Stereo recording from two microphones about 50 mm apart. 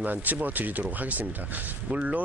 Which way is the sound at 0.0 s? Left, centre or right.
Right.